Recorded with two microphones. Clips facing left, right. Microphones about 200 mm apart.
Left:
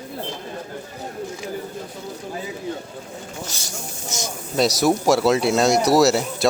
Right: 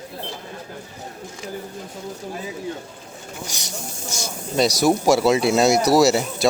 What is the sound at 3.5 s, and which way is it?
Speech, 15° right (ahead or behind).